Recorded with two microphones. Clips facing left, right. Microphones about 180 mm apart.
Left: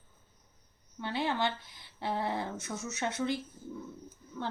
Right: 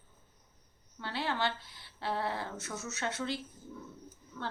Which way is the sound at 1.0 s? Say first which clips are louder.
Left 2 dB; 15° left (ahead or behind).